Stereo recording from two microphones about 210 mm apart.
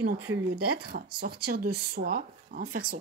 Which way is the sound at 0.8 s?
50° right (ahead or behind).